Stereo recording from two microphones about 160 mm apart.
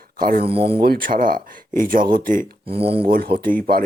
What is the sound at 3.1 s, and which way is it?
Speech, 70° right (ahead or behind).